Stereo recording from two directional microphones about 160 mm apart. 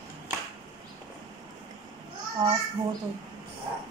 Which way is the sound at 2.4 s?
25° right (ahead or behind).